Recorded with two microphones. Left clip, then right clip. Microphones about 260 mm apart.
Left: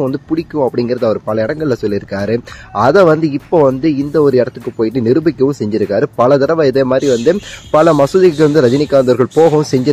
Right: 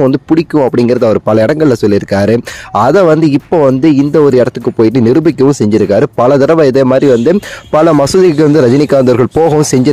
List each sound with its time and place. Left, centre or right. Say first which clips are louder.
0.0 s speech: right 7 dB; right